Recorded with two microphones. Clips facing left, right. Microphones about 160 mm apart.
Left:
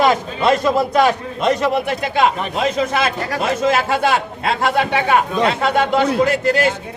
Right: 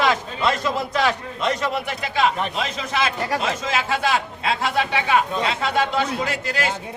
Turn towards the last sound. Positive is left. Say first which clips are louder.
# left 10 dB
turn(degrees=50)  # may be behind; listen again after turning